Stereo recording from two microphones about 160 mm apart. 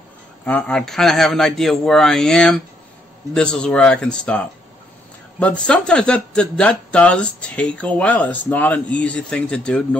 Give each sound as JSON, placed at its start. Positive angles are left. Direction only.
{"t": 0.5, "sound": "a man's voice", "side_deg": 10}